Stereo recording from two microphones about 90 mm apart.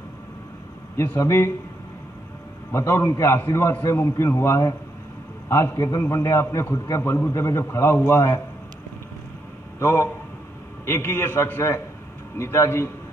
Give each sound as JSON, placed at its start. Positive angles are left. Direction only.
{"t": 1.1, "sound": "a man's voice", "side_deg": 35}
{"t": 2.7, "sound": "a man's voice", "side_deg": 30}
{"t": 9.8, "sound": "a man's voice", "side_deg": 30}